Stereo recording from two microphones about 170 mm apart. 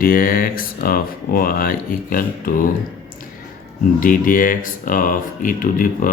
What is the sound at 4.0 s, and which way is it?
Speech, 55° left (ahead or behind).